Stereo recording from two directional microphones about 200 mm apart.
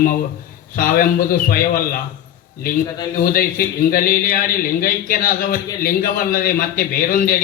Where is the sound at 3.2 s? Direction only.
45° left (ahead or behind).